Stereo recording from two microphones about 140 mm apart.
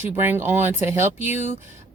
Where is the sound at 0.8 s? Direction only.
50° left (ahead or behind).